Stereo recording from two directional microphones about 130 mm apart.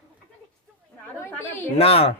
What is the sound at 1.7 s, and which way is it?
Speech, 50° left (ahead or behind).